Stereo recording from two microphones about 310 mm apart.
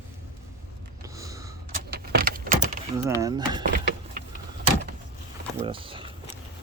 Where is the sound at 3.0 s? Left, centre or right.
Centre.